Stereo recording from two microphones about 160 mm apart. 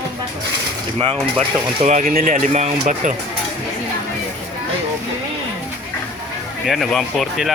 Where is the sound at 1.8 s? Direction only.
50° right (ahead or behind).